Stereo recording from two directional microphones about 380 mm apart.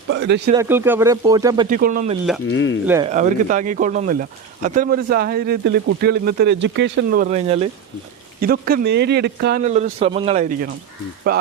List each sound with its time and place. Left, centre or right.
0.1 s speech: right
0.5 s speech: centre
1.7 s speech: right
2.5 s speech: left
2.8 s speech: centre
3.1 s speech: centre